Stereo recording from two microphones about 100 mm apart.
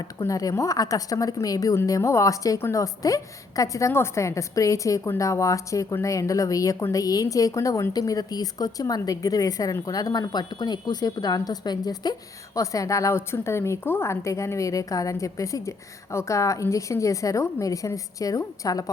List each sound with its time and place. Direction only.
0.0 s a woman's voice: 35° left (ahead or behind)
2.6 s a woman's voice: 25° left (ahead or behind)
2.8 s a woman's voice: 35° left (ahead or behind)